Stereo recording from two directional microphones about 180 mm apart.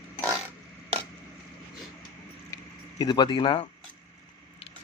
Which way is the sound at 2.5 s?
20° left (ahead or behind).